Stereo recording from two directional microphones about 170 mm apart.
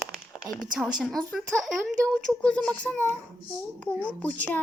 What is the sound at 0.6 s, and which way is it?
A woman's voice, 5° right (ahead or behind).